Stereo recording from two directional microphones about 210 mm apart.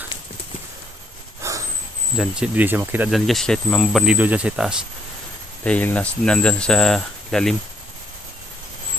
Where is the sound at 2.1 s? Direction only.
5° right (ahead or behind).